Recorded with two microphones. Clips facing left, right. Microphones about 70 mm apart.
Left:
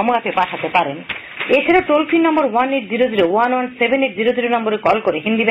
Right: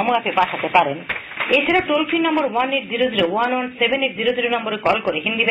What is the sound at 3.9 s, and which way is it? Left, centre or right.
Speech, left.